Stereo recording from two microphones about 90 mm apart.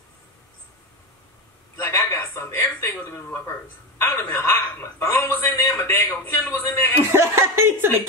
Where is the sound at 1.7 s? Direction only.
30° left (ahead or behind).